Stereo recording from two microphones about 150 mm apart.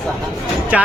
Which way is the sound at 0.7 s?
10° right (ahead or behind).